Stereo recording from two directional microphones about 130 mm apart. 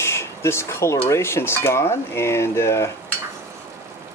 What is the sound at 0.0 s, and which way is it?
Speech, 20° left (ahead or behind).